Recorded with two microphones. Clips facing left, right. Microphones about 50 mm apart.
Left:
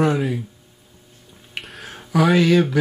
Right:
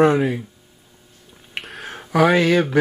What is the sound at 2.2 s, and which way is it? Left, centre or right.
Speech, right.